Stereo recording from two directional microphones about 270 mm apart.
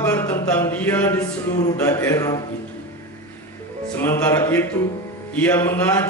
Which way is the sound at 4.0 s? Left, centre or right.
Centre.